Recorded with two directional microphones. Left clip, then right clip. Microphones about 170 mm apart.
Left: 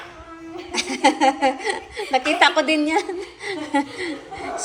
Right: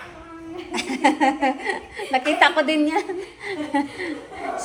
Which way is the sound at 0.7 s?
15° left (ahead or behind).